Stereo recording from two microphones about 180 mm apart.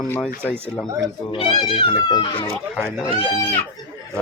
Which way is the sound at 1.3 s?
30° left (ahead or behind).